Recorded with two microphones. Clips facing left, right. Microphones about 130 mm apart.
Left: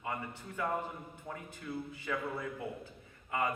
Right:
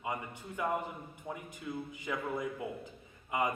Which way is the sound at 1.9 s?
15° right (ahead or behind).